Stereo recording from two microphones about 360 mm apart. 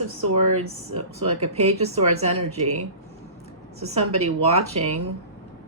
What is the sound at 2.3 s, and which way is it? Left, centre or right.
Speech, right.